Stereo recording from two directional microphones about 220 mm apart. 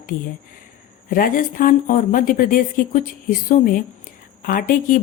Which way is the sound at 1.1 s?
40° left (ahead or behind).